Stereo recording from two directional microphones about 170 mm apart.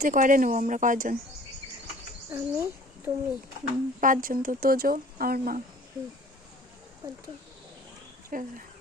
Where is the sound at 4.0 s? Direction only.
55° right (ahead or behind).